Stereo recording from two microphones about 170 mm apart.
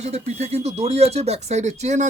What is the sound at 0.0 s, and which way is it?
Speech, 40° right (ahead or behind).